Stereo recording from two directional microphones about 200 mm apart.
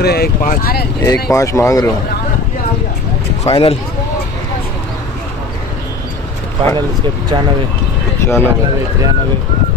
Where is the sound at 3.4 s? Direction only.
25° left (ahead or behind).